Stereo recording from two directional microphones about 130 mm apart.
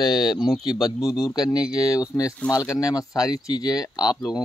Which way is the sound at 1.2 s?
30° left (ahead or behind).